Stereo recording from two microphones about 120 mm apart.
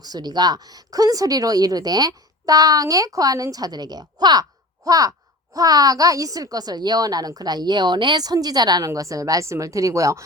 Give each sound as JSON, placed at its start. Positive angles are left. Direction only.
{"t": 0.0, "sound": "speech", "side_deg": -35}